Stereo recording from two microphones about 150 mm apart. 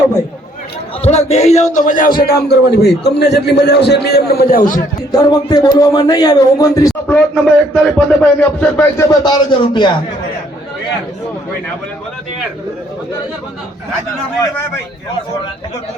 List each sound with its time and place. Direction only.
1.0 s a man's voice: 45° left (ahead or behind); by 4.8 s 70° left (ahead or behind)
5.1 s speech: 25° left (ahead or behind)
7.3 s speech: 5° left (ahead or behind)
9.2 s speech: 30° left (ahead or behind)